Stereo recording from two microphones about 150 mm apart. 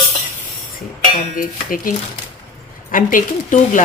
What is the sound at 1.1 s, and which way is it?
Speech, 65° left (ahead or behind).